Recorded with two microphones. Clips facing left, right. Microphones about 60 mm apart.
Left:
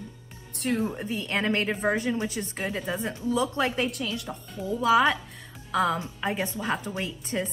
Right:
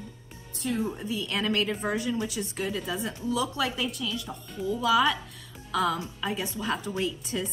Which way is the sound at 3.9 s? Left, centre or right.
Left.